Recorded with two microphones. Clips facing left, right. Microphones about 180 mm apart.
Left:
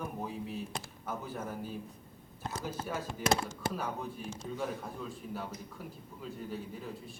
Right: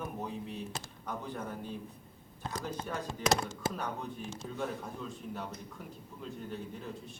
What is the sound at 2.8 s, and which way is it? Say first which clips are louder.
A man's voice: left 1 dB; 5° left (ahead or behind).